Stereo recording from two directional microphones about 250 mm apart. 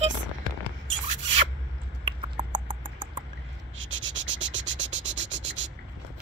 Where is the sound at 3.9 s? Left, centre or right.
Right.